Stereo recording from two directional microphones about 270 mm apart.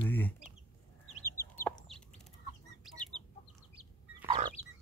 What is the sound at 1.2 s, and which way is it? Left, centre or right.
Chicken, centre.